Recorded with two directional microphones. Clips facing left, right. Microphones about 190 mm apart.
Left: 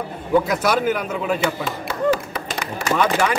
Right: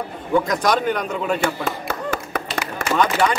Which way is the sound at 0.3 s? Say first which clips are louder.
Left 1 dB; 5° left (ahead or behind).